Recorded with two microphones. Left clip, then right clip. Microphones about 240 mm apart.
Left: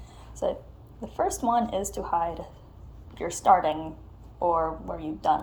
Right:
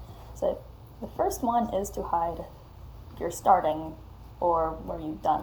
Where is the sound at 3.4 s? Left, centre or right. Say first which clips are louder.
Left 2 dB; left.